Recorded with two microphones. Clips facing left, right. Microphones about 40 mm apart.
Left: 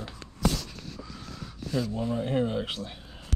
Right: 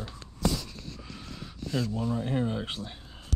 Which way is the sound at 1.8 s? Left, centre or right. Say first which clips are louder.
Left 1 dB; left.